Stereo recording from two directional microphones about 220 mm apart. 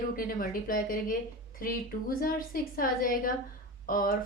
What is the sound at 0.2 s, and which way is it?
A woman's voice, 40° left (ahead or behind).